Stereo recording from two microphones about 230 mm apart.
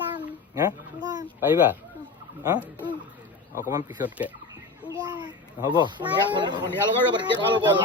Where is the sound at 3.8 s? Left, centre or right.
Centre.